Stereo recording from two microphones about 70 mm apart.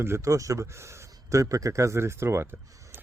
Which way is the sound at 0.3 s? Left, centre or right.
Right.